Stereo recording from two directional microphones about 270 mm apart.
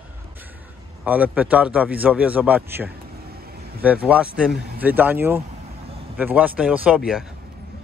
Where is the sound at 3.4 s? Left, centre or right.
Right.